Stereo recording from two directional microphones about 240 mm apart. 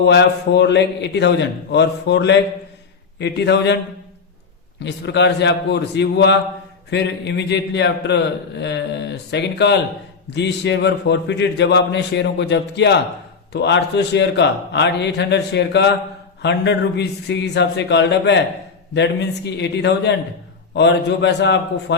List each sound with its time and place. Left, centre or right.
0.0 s a man's voice: left
4.8 s a man's voice: left
19.5 s a man's voice: left